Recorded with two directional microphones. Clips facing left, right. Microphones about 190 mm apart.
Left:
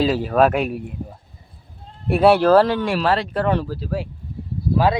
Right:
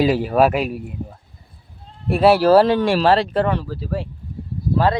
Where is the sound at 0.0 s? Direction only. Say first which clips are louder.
Right 1 dB; 10° right (ahead or behind).